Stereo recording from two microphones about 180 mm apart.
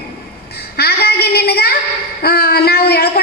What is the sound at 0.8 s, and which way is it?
Child singing, 60° left (ahead or behind).